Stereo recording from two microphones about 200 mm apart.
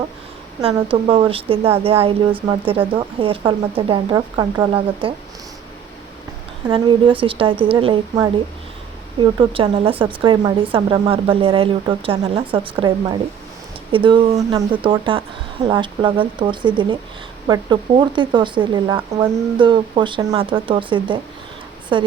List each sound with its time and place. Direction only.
0.6 s speech: 30° right (ahead or behind)
6.7 s speech: 25° right (ahead or behind)